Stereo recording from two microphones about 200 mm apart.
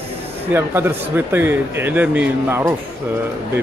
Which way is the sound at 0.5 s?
10° right (ahead or behind).